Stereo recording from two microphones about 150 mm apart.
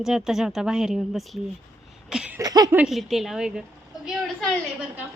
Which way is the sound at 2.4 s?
25° right (ahead or behind).